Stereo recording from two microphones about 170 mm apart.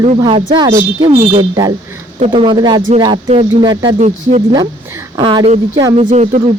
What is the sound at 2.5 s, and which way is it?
Speech, 25° right (ahead or behind).